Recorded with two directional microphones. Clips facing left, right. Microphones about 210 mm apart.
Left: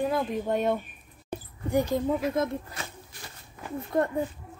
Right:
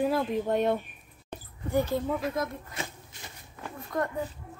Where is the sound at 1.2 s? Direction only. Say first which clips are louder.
Left 4 dB; 15° left (ahead or behind).